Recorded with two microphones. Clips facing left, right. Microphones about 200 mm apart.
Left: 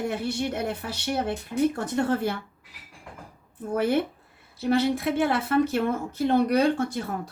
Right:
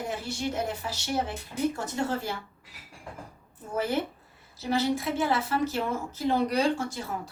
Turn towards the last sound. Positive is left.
turn(degrees=60)  # may be behind; listen again after turning